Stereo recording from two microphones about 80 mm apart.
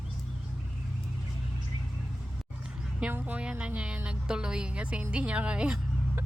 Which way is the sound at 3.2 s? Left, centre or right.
Centre.